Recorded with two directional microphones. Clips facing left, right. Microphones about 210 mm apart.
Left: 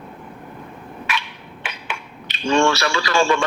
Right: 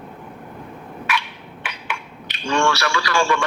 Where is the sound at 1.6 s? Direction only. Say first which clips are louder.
Even; 25° left (ahead or behind).